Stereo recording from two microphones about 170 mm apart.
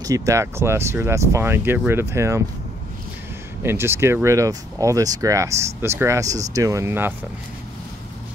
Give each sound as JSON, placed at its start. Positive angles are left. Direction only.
{"t": 0.0, "sound": "speech", "side_deg": -20}
{"t": 3.6, "sound": "speech", "side_deg": -15}